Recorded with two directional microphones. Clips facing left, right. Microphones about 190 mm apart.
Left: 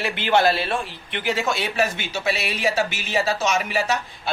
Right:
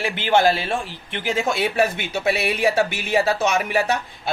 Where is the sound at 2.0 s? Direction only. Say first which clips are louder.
Right 3 dB; 55° right (ahead or behind).